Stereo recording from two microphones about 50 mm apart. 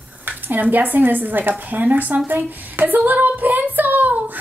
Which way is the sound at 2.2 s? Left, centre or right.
Right.